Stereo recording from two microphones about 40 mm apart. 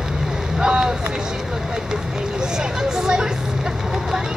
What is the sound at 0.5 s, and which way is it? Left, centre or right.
Vehicle, centre.